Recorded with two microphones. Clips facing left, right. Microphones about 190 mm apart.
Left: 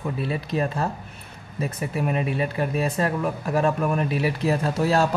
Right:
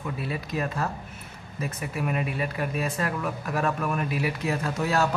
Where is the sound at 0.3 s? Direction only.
30° left (ahead or behind).